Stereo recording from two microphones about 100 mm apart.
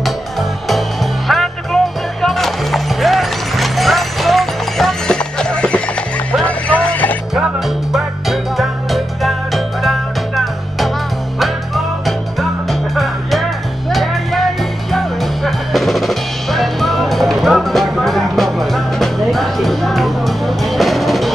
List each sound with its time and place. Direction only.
0.0 s music: centre (ahead or behind); by 7.2 s 15° left (ahead or behind)
7.3 s music: 5° right (ahead or behind)